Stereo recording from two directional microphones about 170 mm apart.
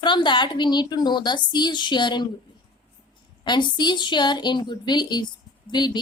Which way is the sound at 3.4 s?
25° left (ahead or behind).